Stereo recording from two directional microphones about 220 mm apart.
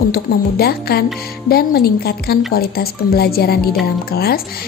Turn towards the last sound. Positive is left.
turn(degrees=45)  # may be behind; listen again after turning